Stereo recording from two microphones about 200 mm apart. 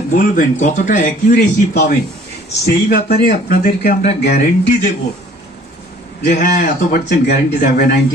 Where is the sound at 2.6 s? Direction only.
50° left (ahead or behind).